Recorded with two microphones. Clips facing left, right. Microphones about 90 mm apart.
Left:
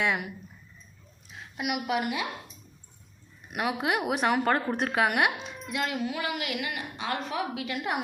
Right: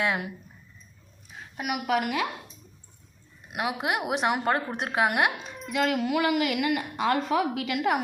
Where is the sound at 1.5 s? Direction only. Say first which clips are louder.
Right 2 dB; 45° right (ahead or behind); by 2.2 s 65° right (ahead or behind).